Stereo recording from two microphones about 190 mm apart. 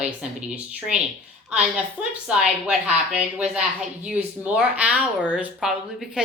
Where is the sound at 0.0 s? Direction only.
5° right (ahead or behind).